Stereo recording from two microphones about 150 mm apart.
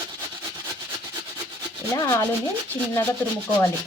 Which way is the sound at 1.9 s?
25° left (ahead or behind).